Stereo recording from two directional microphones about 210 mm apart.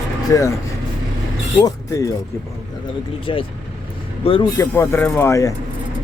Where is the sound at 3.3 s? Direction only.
25° left (ahead or behind).